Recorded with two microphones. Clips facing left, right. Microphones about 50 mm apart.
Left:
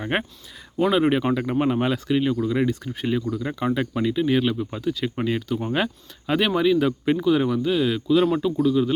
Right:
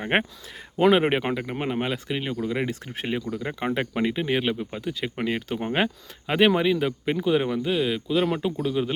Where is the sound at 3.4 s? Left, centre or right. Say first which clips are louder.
Left 3 dB; right.